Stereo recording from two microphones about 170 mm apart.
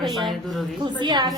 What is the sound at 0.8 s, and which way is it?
Speech, 25° right (ahead or behind).